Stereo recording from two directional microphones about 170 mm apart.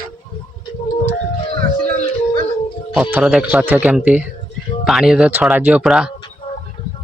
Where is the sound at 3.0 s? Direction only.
10° right (ahead or behind).